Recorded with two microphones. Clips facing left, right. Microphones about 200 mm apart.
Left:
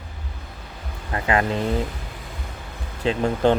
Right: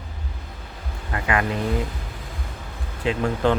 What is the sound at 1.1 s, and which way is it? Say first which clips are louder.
Vehicle: left 2 dB; 30° left (ahead or behind).